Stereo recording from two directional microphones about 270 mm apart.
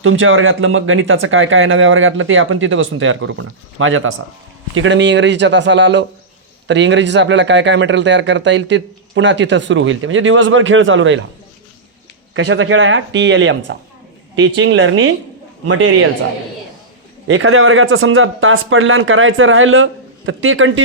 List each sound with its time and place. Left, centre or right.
0.0 s a man's voice: right
12.3 s a man's voice: right
17.2 s a man's voice: right